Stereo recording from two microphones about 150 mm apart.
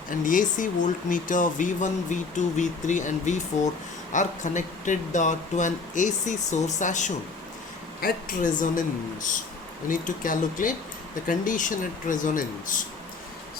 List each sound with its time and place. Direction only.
0.1 s speech: 60° left (ahead or behind)
8.0 s a woman's voice: 65° left (ahead or behind)
9.9 s speech: 65° left (ahead or behind)